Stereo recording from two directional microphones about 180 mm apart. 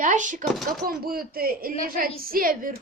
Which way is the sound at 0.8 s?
55° right (ahead or behind).